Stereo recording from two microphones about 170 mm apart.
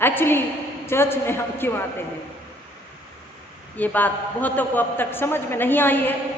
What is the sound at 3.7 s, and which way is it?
Speech, 10° left (ahead or behind).